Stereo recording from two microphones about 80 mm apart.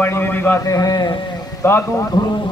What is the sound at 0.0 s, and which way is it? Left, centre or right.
Speech, left.